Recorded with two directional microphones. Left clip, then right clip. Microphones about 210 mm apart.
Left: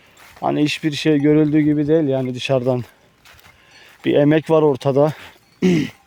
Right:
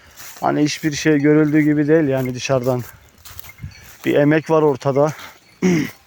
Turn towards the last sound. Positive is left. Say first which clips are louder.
# even
turn(degrees=30)  # may be behind; listen again after turning